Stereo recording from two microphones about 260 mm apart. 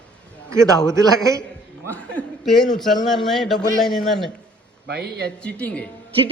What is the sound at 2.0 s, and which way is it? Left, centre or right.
A woman's voice, centre.